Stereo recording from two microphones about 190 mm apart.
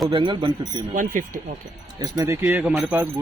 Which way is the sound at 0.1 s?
25° right (ahead or behind).